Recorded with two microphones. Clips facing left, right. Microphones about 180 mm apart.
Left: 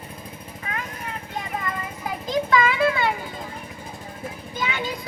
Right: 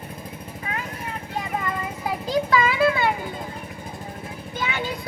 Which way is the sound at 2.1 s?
35° right (ahead or behind).